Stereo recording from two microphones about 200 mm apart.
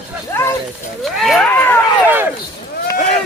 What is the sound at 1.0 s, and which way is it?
Cat, centre (ahead or behind).